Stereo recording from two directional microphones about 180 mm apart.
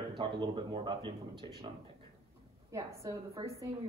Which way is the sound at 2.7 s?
20° right (ahead or behind).